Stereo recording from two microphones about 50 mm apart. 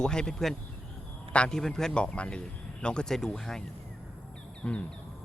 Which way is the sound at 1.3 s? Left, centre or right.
Left.